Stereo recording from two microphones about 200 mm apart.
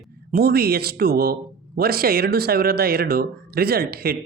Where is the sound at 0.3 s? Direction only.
50° right (ahead or behind).